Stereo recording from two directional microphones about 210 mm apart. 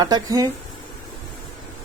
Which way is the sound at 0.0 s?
20° right (ahead or behind).